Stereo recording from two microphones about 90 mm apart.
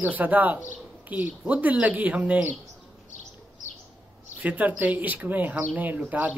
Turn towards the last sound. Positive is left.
turn(degrees=-20)  # may be behind; listen again after turning